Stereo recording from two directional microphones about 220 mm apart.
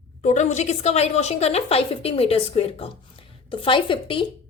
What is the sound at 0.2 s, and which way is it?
A woman's voice, 35° left (ahead or behind).